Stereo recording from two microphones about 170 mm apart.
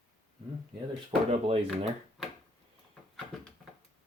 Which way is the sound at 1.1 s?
40° right (ahead or behind).